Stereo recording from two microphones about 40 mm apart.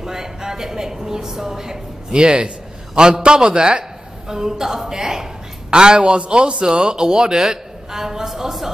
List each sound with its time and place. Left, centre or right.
0.0 s a man's voice: centre